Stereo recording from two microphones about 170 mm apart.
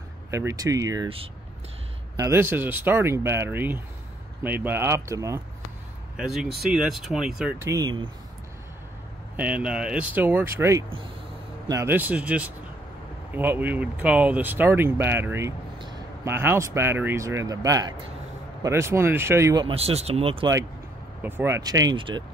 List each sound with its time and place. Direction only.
0.3 s speech: 15° right (ahead or behind)
1.0 s speech: 35° right (ahead or behind)
2.1 s speech: 15° right (ahead or behind)
6.1 s speech: 5° right (ahead or behind)
7.6 s speech: 20° right (ahead or behind)
9.4 s speech: 5° right (ahead or behind)
19.6 s speech: 35° right (ahead or behind)
21.2 s speech: 10° right (ahead or behind); by 22.2 s 25° right (ahead or behind)